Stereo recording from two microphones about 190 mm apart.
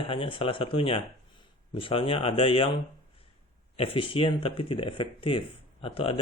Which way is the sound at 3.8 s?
30° left (ahead or behind).